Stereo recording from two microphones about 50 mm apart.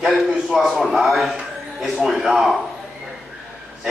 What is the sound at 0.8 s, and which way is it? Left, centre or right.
A man's voice, centre.